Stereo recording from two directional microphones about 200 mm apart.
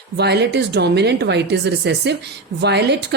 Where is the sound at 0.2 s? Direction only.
55° right (ahead or behind).